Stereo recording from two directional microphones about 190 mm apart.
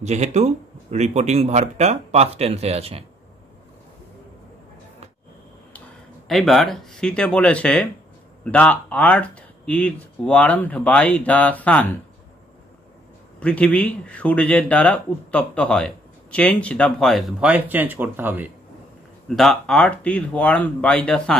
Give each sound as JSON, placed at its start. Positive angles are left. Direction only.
{"t": 0.0, "sound": "speech", "side_deg": -35}
{"t": 6.2, "sound": "speech", "side_deg": 0}
{"t": 13.4, "sound": "speech", "side_deg": 5}
{"t": 19.2, "sound": "speech", "side_deg": 0}